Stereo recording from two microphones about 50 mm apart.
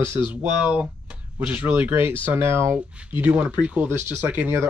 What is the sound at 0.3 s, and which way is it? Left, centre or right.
Speech, right.